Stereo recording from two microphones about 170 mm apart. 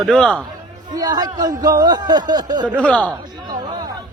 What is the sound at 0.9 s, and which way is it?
Speech, 25° right (ahead or behind).